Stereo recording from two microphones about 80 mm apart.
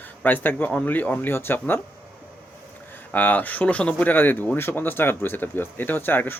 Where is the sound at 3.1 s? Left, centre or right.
Left.